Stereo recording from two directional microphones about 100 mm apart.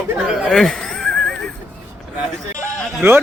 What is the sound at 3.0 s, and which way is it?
Speech, 25° right (ahead or behind).